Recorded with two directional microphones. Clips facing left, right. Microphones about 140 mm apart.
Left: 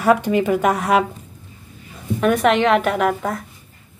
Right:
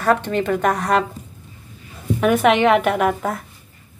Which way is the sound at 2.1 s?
Centre (ahead or behind).